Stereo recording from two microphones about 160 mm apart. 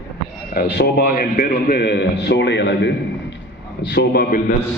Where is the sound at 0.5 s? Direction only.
75° left (ahead or behind).